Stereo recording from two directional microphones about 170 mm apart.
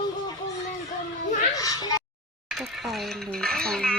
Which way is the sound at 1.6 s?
20° left (ahead or behind).